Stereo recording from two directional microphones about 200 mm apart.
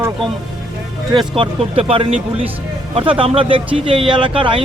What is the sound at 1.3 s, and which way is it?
Speech, 30° right (ahead or behind).